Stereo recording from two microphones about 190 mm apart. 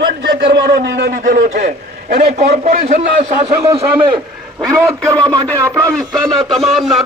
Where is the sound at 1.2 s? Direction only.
50° right (ahead or behind).